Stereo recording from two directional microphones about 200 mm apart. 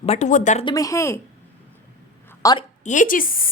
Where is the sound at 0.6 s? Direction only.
15° left (ahead or behind).